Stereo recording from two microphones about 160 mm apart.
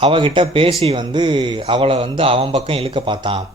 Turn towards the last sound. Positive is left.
turn(degrees=-30)  # may be behind; listen again after turning